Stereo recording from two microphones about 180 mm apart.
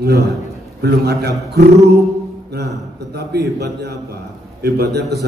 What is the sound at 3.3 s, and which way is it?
A man's voice, 65° right (ahead or behind).